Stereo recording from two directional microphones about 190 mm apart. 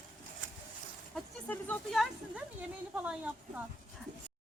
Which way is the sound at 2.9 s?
10° right (ahead or behind).